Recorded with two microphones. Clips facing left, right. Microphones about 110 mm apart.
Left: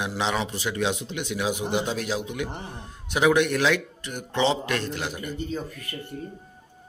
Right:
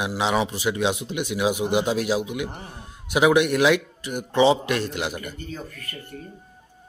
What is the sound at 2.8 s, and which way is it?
A man's voice, 15° right (ahead or behind).